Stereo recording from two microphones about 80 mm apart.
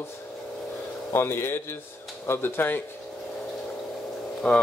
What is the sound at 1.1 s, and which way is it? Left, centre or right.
A man's voice, left.